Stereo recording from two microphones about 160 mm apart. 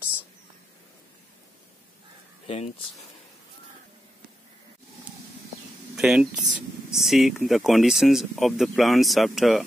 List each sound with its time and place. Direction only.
2.4 s speech: 35° left (ahead or behind)
5.9 s speech: 5° right (ahead or behind)